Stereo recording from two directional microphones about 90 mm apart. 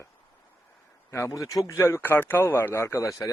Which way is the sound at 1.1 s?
30° left (ahead or behind).